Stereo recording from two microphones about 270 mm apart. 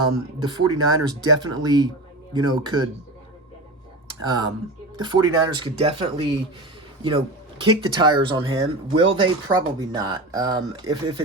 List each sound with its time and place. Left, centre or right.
0.0 s speech: centre
4.9 s speech: centre
7.6 s speech: centre